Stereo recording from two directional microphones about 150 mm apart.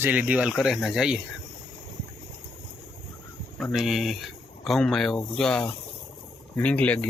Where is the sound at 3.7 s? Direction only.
Centre (ahead or behind).